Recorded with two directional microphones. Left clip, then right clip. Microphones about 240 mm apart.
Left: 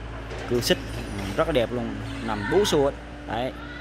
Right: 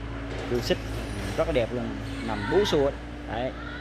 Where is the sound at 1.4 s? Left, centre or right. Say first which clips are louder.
Left 3 dB; centre.